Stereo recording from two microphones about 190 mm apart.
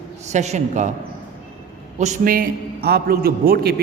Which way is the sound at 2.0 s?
45° right (ahead or behind).